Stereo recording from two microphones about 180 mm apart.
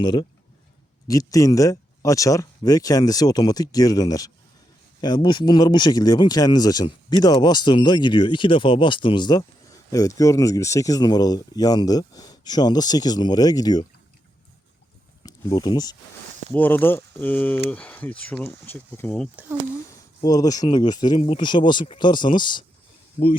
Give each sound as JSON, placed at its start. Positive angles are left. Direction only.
{"t": 0.0, "sound": "speech", "side_deg": 25}
{"t": 15.2, "sound": "speech", "side_deg": 20}
{"t": 16.5, "sound": "speech", "side_deg": 10}
{"t": 20.2, "sound": "speech", "side_deg": 20}